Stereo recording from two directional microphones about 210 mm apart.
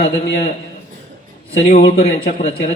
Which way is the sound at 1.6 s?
35° left (ahead or behind).